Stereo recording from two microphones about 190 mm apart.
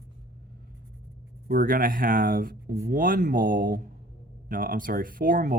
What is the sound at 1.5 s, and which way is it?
Speech, 50° right (ahead or behind).